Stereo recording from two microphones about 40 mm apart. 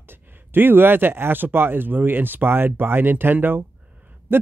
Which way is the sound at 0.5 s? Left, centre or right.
Right.